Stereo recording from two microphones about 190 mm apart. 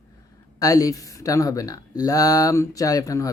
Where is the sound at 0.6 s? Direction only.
20° left (ahead or behind).